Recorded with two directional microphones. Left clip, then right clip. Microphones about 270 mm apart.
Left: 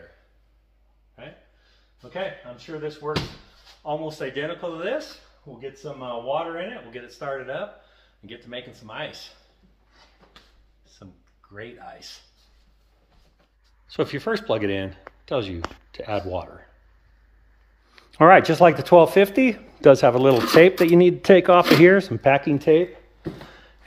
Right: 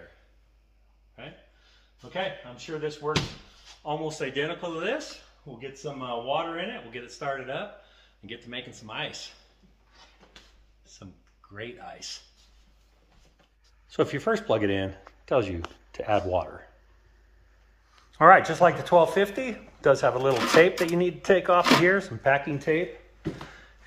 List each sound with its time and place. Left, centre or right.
2.1 s speech: centre
6.9 s speech: centre
11.5 s speech: centre
13.8 s speech: centre
16.1 s speech: left
18.1 s speech: left